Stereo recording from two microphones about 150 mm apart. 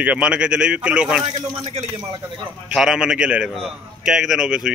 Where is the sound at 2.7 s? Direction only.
5° right (ahead or behind).